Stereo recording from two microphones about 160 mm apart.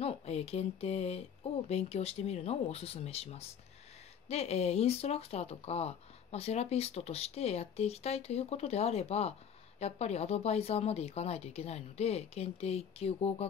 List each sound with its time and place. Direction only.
0.0 s speech: 40° left (ahead or behind)